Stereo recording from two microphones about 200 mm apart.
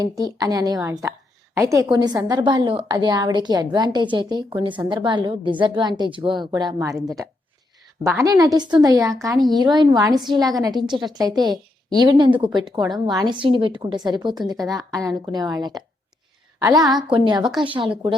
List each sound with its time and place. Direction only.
0.0 s a woman's voice: 20° right (ahead or behind)
8.0 s a woman's voice: 15° right (ahead or behind)